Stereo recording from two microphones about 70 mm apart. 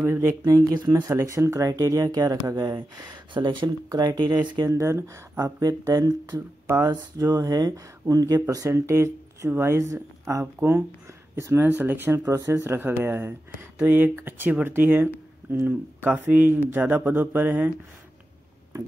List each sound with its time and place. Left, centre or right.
0.0 s speech: right
0.4 s speech: right
1.2 s speech: right
3.0 s speech: right
4.6 s speech: right
5.4 s speech: right
8.5 s speech: right
11.6 s speech: right
12.3 s speech: right